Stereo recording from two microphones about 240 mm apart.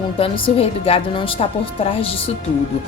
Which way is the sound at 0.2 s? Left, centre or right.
Left.